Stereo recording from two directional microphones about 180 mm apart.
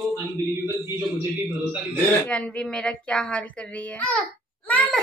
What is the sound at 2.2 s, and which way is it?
A child's voice, 5° left (ahead or behind).